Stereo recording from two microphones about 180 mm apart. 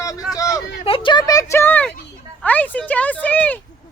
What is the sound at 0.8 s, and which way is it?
Speech, 30° left (ahead or behind).